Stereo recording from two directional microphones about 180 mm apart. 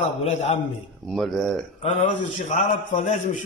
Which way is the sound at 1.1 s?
Centre (ahead or behind).